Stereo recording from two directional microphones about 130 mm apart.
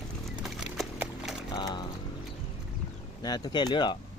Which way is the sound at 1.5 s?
35° left (ahead or behind).